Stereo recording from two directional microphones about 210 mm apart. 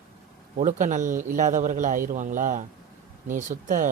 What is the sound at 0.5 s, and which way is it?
A man's voice, 35° right (ahead or behind).